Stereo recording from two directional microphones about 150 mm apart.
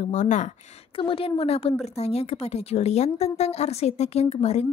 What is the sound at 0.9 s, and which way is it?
A woman's voice, 35° left (ahead or behind).